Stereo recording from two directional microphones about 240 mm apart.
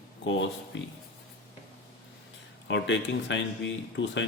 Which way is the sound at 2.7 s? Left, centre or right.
Left.